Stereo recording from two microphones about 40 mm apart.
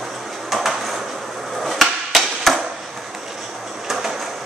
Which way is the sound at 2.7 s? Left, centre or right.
Centre.